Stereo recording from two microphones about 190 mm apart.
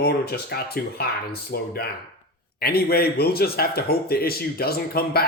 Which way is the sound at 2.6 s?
55° left (ahead or behind).